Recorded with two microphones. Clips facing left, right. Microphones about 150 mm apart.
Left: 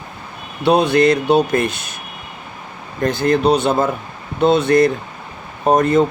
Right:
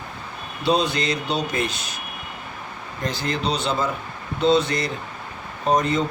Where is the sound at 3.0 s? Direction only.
55° left (ahead or behind).